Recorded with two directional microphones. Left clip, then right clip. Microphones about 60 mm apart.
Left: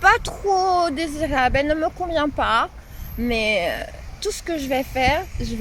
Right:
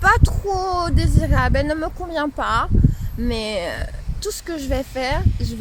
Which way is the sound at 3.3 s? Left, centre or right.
Right.